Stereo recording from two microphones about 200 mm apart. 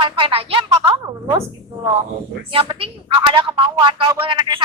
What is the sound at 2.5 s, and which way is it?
A woman's voice, 25° right (ahead or behind).